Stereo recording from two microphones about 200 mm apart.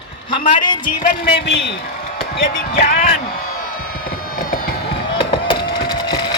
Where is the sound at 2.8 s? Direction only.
50° left (ahead or behind).